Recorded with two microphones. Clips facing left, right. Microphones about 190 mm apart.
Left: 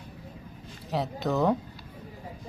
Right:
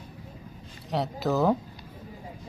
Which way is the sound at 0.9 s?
Centre (ahead or behind).